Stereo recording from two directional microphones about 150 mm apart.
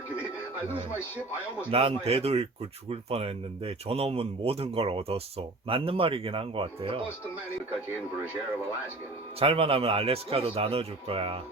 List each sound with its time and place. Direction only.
1.7 s speech: 40° right (ahead or behind)
9.4 s speech: 40° right (ahead or behind)